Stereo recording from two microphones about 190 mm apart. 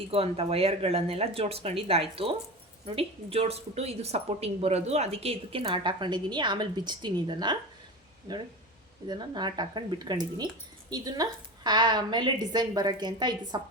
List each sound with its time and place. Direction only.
0.1 s a woman's voice: 30° right (ahead or behind)